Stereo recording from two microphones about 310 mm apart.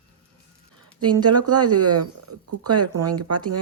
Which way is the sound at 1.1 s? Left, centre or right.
Centre.